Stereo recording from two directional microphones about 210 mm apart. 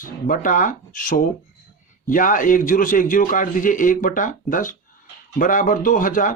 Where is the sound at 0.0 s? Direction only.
40° left (ahead or behind).